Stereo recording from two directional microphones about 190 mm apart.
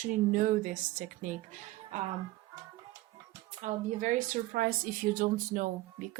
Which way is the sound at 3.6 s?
40° right (ahead or behind).